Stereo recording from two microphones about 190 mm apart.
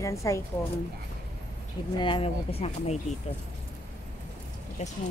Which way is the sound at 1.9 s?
25° left (ahead or behind).